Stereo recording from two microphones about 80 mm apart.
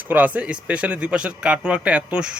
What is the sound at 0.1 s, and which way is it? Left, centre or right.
Speech, centre.